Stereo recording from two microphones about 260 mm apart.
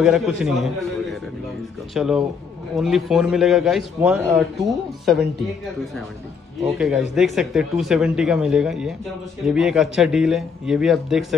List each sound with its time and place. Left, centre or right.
0.0 s a man's voice: centre
2.0 s a man's voice: centre
6.6 s a man's voice: centre